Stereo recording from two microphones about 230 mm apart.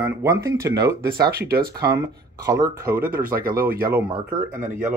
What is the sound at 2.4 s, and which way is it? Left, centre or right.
Speech, centre.